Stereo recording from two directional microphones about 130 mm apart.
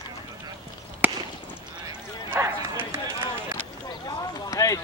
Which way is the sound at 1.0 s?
15° right (ahead or behind).